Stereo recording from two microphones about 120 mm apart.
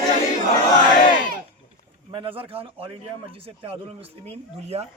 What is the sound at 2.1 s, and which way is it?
Speech, 50° right (ahead or behind).